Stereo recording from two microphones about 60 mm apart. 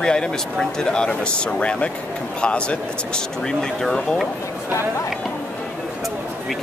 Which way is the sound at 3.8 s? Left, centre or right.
Centre.